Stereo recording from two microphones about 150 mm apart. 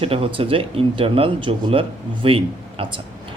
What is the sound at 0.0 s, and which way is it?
A man's voice, 40° right (ahead or behind).